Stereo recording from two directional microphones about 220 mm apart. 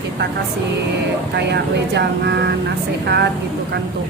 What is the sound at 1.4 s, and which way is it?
Speech, 50° right (ahead or behind).